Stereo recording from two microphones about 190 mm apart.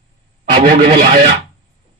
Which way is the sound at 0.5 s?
40° right (ahead or behind).